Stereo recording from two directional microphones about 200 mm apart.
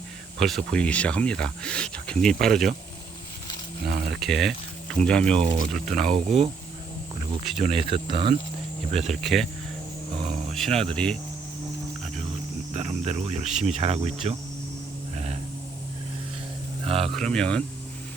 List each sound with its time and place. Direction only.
0.3 s speech: centre (ahead or behind)
3.8 s speech: 50° right (ahead or behind)
4.2 s speech: centre (ahead or behind)
6.2 s speech: 30° right (ahead or behind)
7.9 s speech: 25° right (ahead or behind)
9.2 s speech: centre (ahead or behind)
10.5 s speech: centre (ahead or behind)
12.7 s speech: 35° right (ahead or behind)
15.1 s a sound: 35° right (ahead or behind)
16.8 s speech: 30° right (ahead or behind)
17.2 s speech: 5° left (ahead or behind)